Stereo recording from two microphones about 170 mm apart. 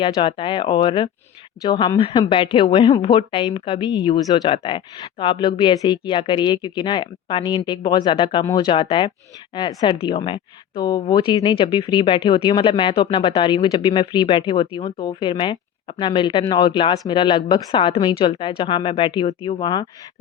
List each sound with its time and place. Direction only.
0.0 s a woman's voice: 30° left (ahead or behind)